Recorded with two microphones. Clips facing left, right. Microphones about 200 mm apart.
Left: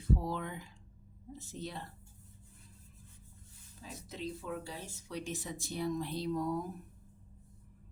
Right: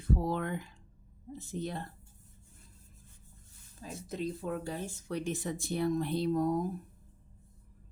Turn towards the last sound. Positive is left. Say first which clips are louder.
# right 5 dB
turn(degrees=-45)  # may be behind; listen again after turning